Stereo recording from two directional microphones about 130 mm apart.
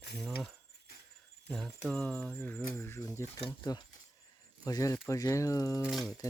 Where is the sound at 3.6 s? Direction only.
30° left (ahead or behind).